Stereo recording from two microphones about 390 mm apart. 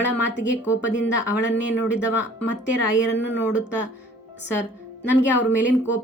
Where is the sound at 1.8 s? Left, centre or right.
Centre.